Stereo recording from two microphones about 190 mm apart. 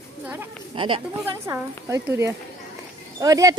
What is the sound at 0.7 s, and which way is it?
Speech, 25° right (ahead or behind).